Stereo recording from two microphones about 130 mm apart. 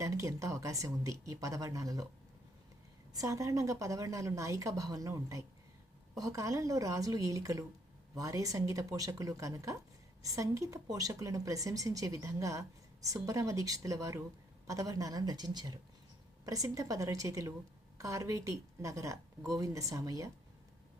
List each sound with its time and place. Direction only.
0.0 s speech: 25° right (ahead or behind)
3.1 s speech: 25° right (ahead or behind)